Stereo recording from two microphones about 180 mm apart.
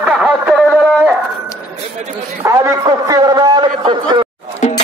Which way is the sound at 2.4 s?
20° right (ahead or behind).